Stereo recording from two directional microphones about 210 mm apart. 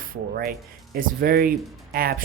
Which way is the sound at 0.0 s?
45° right (ahead or behind).